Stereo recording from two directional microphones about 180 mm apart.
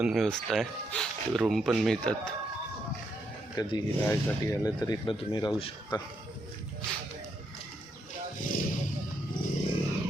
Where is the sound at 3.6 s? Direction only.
20° left (ahead or behind).